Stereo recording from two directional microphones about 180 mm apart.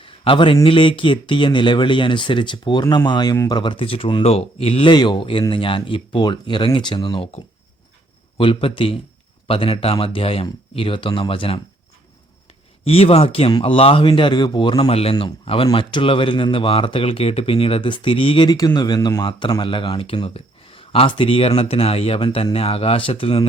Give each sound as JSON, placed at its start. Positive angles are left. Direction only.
{"t": 0.0, "sound": "speech", "side_deg": 30}
{"t": 12.8, "sound": "speech", "side_deg": 30}